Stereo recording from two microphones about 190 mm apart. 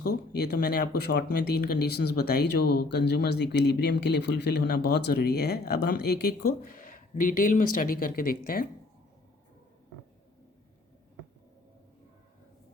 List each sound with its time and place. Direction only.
0.0 s speech: 60° left (ahead or behind)